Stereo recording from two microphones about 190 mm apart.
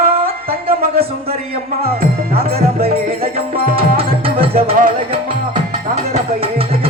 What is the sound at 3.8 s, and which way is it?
Music, 30° right (ahead or behind).